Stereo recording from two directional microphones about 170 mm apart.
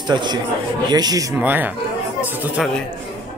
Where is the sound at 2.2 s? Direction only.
10° right (ahead or behind).